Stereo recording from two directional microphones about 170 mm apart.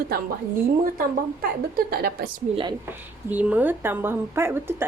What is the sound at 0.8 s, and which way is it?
A woman's voice, 60° right (ahead or behind).